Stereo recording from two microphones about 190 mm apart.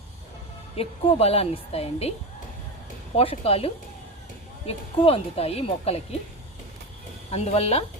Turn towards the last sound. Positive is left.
turn(degrees=30)  # may be behind; listen again after turning